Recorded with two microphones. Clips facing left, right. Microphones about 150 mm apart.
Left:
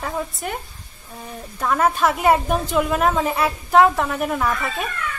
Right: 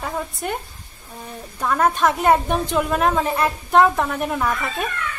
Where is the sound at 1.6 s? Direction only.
Centre (ahead or behind).